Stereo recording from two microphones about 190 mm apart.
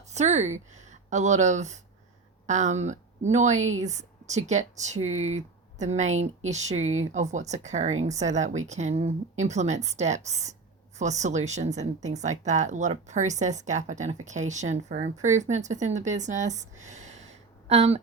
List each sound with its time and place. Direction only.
0.1 s a woman's voice: 35° right (ahead or behind)
5.0 s speech: 90° right
5.8 s speech: 35° right (ahead or behind)
6.7 s speech: 90° right
7.1 s speech: 40° right (ahead or behind)